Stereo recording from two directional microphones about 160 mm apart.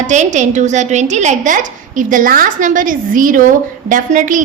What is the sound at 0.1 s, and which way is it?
A woman's voice, 50° right (ahead or behind).